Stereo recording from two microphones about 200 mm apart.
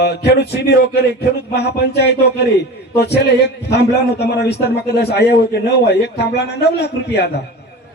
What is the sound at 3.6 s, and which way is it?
A man's voice, 55° left (ahead or behind).